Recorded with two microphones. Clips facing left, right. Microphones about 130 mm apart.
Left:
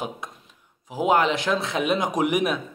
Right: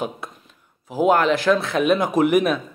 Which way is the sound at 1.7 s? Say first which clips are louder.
Right 5 dB; 60° right (ahead or behind).